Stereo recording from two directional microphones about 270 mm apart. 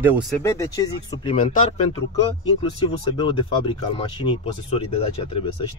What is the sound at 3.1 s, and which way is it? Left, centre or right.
Speech, centre.